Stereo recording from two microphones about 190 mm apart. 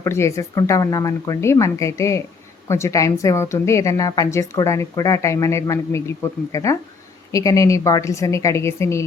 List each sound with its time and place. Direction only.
0.0 s a woman's voice: 15° left (ahead or behind)